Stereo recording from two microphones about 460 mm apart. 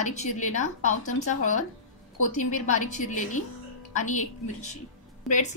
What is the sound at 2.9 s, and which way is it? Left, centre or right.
A woman's voice, centre.